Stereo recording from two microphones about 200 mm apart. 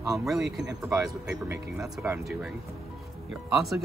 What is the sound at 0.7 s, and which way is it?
Speech, 15° right (ahead or behind).